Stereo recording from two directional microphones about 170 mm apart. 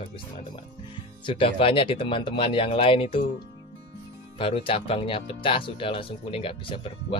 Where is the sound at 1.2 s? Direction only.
30° left (ahead or behind).